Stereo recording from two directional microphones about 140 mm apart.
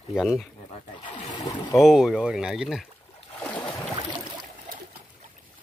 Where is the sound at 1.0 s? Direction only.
30° left (ahead or behind).